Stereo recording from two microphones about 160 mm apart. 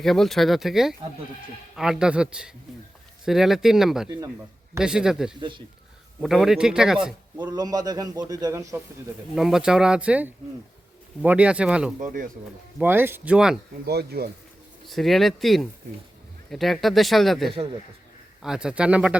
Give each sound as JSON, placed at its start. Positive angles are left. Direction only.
{"t": 0.0, "sound": "speech", "side_deg": 0}
{"t": 5.4, "sound": "speech", "side_deg": -30}
{"t": 6.2, "sound": "speech", "side_deg": 0}
{"t": 7.3, "sound": "a man's voice", "side_deg": -25}
{"t": 9.3, "sound": "speech", "side_deg": 0}
{"t": 11.9, "sound": "speech", "side_deg": -55}
{"t": 12.8, "sound": "speech", "side_deg": -15}
{"t": 13.8, "sound": "speech", "side_deg": -90}
{"t": 14.8, "sound": "speech", "side_deg": 0}